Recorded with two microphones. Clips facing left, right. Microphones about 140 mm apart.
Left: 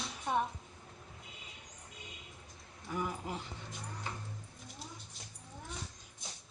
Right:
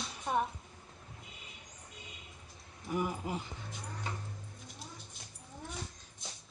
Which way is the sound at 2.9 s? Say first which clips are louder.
Right 3 dB; 10° right (ahead or behind).